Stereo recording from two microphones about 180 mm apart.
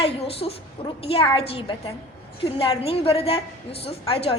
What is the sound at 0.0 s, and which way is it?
A woman's voice, 30° left (ahead or behind).